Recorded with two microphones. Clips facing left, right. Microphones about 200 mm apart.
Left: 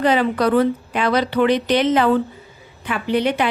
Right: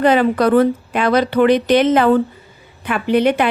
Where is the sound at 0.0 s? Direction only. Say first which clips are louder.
Right 4 dB; 50° right (ahead or behind).